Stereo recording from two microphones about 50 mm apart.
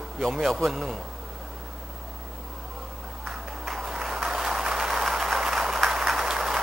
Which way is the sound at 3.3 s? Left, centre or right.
Centre.